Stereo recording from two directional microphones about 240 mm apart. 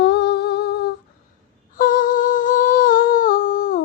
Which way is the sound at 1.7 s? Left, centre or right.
Left.